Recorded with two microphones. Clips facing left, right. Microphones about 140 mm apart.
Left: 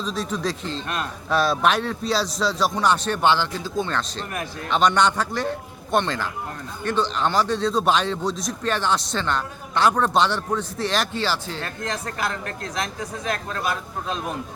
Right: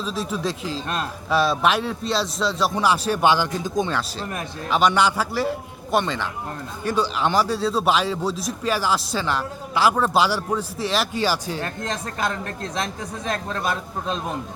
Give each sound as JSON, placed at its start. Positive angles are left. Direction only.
{"t": 0.0, "sound": "a man's voice", "side_deg": -5}
{"t": 11.8, "sound": "speech", "side_deg": -25}